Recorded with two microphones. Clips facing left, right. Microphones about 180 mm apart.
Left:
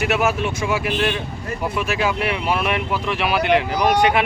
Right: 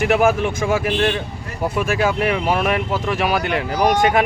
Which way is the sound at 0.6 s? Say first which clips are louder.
Right 3 dB; 45° right (ahead or behind).